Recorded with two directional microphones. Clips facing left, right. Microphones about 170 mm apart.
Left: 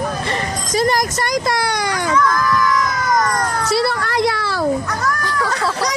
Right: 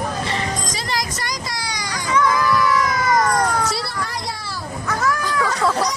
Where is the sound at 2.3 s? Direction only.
5° right (ahead or behind).